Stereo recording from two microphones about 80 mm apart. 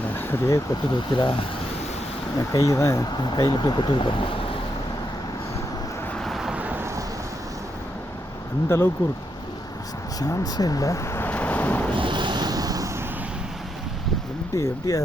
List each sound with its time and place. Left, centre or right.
0.1 s a sound: left
0.9 s speech: left
2.4 s speech: left
3.2 s speech: left
6.2 s vehicle: centre
6.5 s a sound: centre
8.7 s speech: left
10.2 s speech: left
11.2 s vehicle: centre
11.9 s a sound: right
14.5 s speech: left